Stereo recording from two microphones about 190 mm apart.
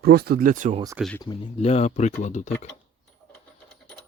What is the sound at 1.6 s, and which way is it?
Speech, 35° left (ahead or behind).